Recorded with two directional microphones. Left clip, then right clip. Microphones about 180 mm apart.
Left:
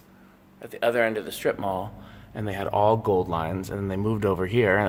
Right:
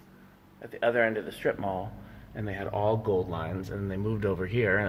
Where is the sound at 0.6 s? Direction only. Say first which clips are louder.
Left 3 dB; 20° left (ahead or behind).